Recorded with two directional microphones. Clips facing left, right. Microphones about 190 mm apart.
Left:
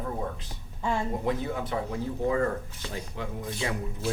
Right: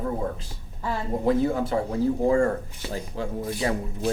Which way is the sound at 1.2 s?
35° right (ahead or behind).